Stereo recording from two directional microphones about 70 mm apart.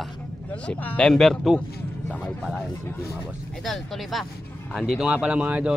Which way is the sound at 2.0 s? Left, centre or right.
Centre.